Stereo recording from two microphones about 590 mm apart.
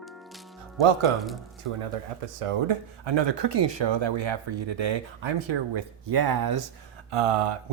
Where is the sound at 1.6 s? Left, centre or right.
Right.